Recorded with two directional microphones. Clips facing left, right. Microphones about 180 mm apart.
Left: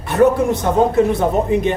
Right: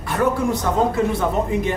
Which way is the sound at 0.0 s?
25° left (ahead or behind).